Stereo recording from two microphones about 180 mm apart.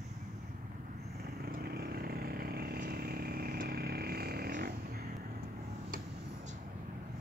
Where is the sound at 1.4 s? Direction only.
60° right (ahead or behind).